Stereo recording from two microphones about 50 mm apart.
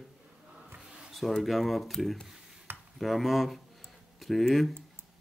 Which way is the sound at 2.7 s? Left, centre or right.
Right.